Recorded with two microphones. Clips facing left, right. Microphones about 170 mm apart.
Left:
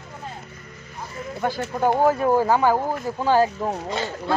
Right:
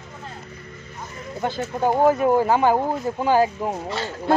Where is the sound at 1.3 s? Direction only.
20° right (ahead or behind).